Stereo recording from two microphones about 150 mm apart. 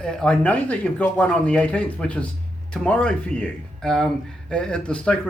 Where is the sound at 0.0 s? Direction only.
5° left (ahead or behind).